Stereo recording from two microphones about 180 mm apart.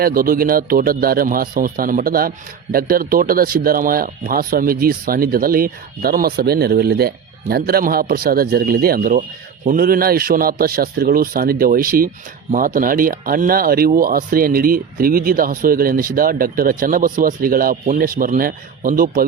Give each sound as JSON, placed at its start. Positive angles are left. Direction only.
{"t": 0.0, "sound": "a man's voice", "side_deg": -55}